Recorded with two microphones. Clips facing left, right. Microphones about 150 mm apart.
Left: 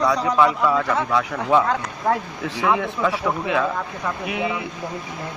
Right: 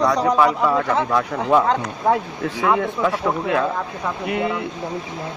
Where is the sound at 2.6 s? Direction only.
Centre (ahead or behind).